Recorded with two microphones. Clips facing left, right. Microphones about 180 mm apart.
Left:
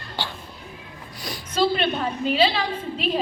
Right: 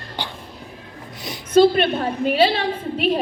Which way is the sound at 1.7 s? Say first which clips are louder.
Right 4 dB; 50° right (ahead or behind).